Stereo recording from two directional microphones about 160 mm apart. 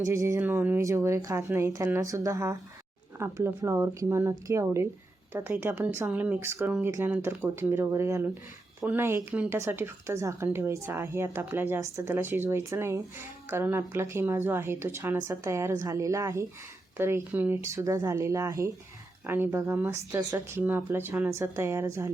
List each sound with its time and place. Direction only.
0.0 s speech: 20° right (ahead or behind)